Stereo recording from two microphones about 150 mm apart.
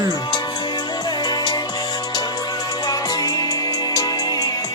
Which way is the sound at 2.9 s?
25° left (ahead or behind).